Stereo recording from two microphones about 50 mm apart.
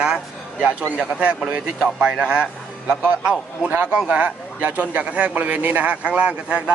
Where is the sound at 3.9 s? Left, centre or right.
Right.